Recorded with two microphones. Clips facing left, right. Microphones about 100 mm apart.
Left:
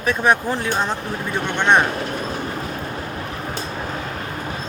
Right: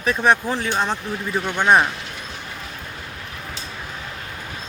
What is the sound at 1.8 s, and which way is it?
Vehicle, 45° left (ahead or behind).